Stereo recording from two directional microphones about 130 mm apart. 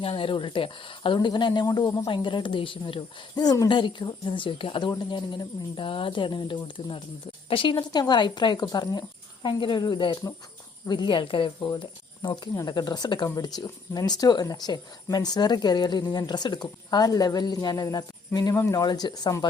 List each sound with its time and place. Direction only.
0.0 s speech: 45° left (ahead or behind)